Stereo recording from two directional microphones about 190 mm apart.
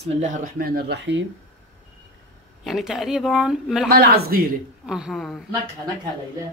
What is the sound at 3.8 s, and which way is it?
Speech, 55° right (ahead or behind).